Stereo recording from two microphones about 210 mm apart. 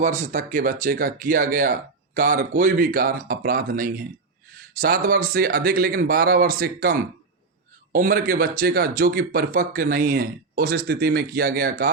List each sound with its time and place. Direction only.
0.0 s speech: 35° right (ahead or behind)
7.9 s speech: 45° right (ahead or behind)